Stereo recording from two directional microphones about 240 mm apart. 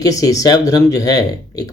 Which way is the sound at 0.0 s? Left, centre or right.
Centre.